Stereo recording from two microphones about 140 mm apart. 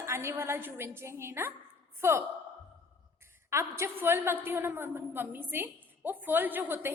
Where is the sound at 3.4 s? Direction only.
20° right (ahead or behind).